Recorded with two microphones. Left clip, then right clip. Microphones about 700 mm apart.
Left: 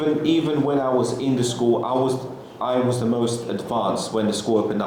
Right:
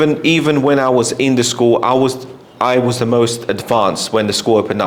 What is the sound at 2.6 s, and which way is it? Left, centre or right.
Speech, right.